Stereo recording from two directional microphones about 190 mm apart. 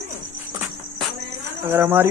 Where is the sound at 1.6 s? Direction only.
10° right (ahead or behind).